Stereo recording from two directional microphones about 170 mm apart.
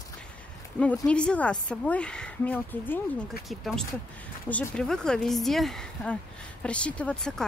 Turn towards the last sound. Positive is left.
turn(degrees=5)  # may be behind; listen again after turning